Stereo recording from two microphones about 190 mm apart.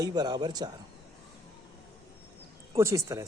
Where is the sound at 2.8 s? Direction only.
15° right (ahead or behind).